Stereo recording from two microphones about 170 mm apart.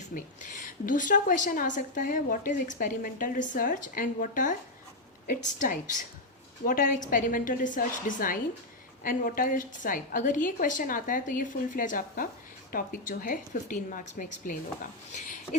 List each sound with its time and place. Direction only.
0.1 s a woman's voice: 55° left (ahead or behind)